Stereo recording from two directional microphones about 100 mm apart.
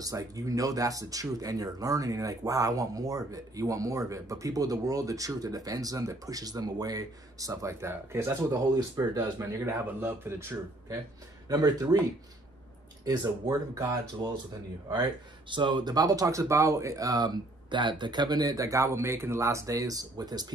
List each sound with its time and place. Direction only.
0.0 s speech: 35° right (ahead or behind)
8.7 s speech: 35° right (ahead or behind)
9.7 s speech: 20° right (ahead or behind)
11.4 s speech: 40° right (ahead or behind)
13.0 s speech: 40° right (ahead or behind)